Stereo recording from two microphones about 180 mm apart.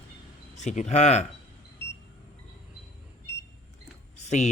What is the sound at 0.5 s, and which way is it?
Speech, 40° left (ahead or behind).